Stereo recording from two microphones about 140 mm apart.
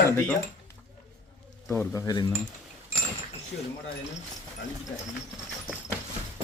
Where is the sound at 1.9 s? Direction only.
30° left (ahead or behind).